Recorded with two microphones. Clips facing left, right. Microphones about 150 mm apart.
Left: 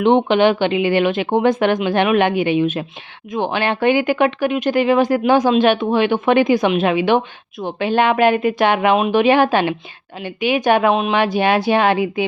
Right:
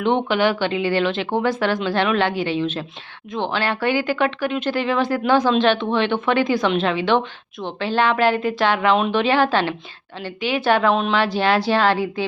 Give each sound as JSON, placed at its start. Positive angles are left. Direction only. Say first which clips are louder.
{"t": 0.0, "sound": "a woman's voice", "louder": "left 5 dB", "side_deg": 20}